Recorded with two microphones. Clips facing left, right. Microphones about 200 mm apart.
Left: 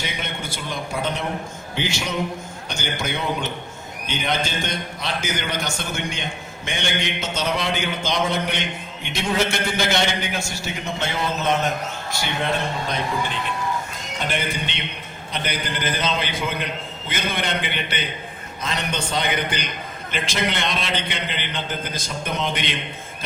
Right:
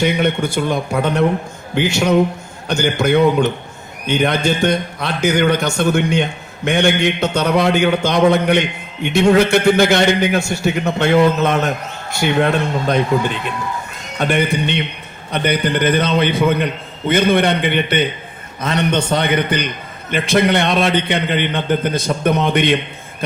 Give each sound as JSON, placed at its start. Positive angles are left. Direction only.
{"t": 0.0, "sound": "a man's voice", "side_deg": -55}
{"t": 14.2, "sound": "a man's voice", "side_deg": -60}